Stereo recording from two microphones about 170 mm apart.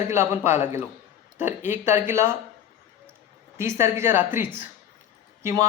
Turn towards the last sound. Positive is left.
turn(degrees=-20)  # may be behind; listen again after turning